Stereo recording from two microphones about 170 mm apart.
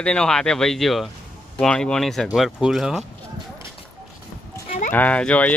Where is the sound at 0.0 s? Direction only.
5° left (ahead or behind).